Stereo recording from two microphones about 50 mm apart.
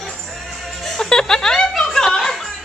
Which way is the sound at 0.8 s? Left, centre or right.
Centre.